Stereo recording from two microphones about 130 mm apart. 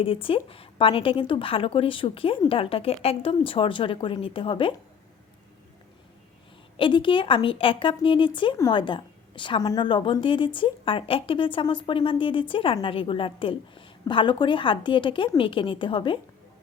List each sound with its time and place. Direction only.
0.0 s a woman's voice: 45° left (ahead or behind)
6.7 s a woman's voice: 40° left (ahead or behind)